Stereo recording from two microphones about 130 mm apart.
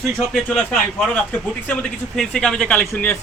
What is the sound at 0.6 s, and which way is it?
Speech, 10° left (ahead or behind).